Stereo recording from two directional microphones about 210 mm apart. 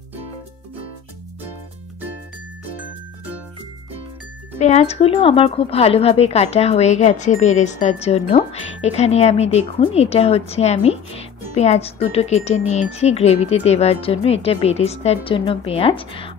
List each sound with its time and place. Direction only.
4.6 s speech: 30° left (ahead or behind)